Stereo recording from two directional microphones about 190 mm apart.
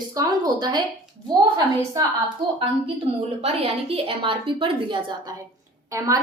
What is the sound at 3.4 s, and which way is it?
A woman's voice, 30° right (ahead or behind).